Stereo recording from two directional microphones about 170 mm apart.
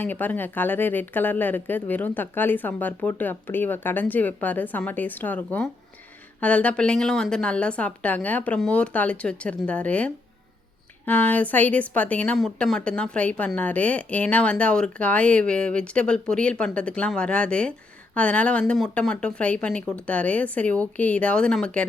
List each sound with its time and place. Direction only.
0.0 s speech: 10° left (ahead or behind)